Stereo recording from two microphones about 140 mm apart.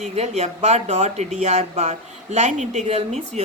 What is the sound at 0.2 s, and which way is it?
Speech, 50° right (ahead or behind).